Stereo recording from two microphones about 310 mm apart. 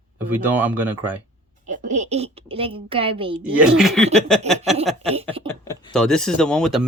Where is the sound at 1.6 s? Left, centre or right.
Right.